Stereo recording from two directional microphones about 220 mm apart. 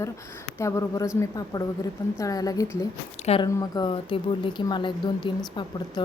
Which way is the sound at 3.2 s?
25° left (ahead or behind).